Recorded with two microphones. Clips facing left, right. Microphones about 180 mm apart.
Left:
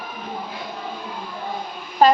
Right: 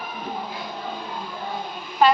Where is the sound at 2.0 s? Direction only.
35° left (ahead or behind).